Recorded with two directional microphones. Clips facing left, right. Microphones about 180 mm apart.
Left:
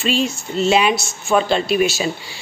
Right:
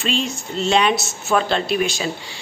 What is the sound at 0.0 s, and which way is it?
A man's voice, 5° left (ahead or behind).